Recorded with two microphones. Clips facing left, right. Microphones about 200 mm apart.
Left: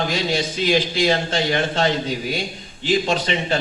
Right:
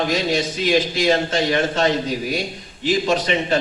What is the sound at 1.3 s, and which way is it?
Speech, 30° left (ahead or behind).